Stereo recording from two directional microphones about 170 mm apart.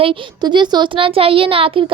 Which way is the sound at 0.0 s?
30° right (ahead or behind).